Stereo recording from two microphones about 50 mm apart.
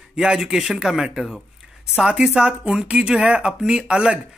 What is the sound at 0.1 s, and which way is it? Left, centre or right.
Speech, centre.